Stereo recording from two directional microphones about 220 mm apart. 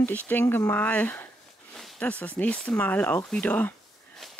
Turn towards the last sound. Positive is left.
turn(degrees=0)  # may be behind; listen again after turning